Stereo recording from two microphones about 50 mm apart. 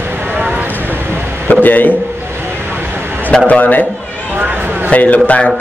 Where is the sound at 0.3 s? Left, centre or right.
Right.